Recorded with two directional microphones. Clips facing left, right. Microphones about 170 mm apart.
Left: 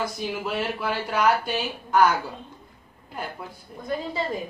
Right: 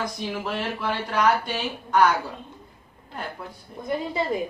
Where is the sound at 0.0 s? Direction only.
5° left (ahead or behind).